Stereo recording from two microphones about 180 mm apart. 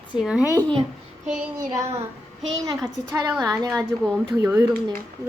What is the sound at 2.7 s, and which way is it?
A woman's voice, 20° right (ahead or behind).